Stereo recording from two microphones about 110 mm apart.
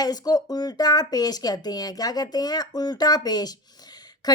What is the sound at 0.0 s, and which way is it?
A woman's voice, 35° left (ahead or behind).